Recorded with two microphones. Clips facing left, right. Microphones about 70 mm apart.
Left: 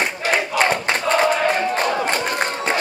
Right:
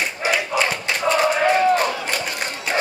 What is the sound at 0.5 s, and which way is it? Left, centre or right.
Battle cry, left.